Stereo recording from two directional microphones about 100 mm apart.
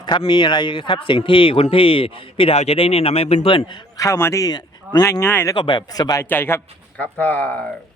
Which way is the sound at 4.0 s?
30° left (ahead or behind).